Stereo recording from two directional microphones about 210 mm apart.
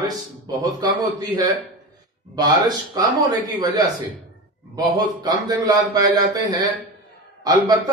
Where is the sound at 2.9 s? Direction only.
20° right (ahead or behind).